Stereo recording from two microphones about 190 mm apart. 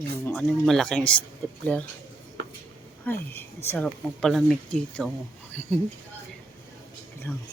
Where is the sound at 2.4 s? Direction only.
65° right (ahead or behind).